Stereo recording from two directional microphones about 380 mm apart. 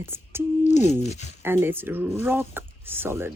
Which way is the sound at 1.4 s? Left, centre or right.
Centre.